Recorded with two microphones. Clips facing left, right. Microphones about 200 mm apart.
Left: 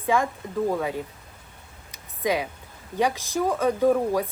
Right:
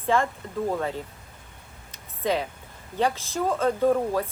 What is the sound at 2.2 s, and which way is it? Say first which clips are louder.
Speech: left 1 dB; 10° left (ahead or behind).